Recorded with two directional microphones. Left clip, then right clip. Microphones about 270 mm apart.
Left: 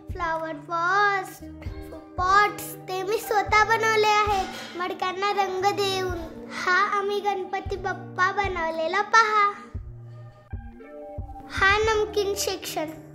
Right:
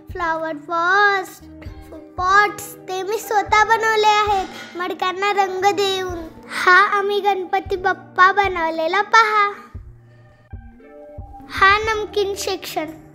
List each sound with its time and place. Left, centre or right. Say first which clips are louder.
0.1 s a child's voice: right 6 dB; centre
6.4 s a child's voice: right 10 dB; centre
11.4 s a child's voice: right 6 dB; centre